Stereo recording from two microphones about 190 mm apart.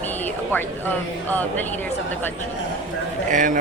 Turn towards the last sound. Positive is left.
turn(degrees=-45)  # may be behind; listen again after turning